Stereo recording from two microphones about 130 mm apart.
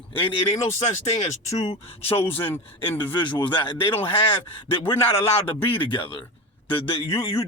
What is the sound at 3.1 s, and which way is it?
A man's voice, 35° left (ahead or behind).